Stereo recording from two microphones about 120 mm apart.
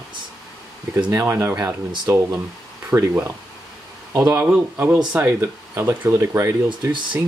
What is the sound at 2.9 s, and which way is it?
Speech, 20° right (ahead or behind).